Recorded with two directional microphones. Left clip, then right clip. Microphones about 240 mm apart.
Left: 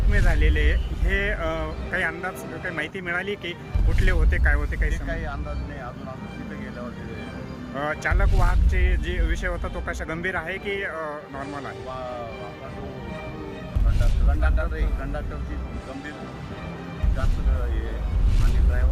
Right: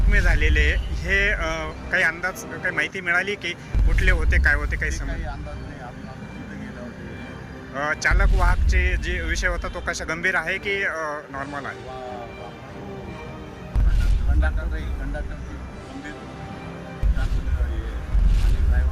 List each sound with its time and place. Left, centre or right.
0.1 s speech: centre
7.8 s speech: centre